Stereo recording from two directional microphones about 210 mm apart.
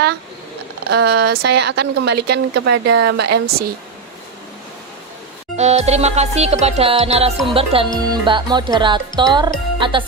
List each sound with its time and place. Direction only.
0.9 s a woman's voice: 50° right (ahead or behind)
5.5 s music: 30° right (ahead or behind)
7.4 s speech: 25° right (ahead or behind)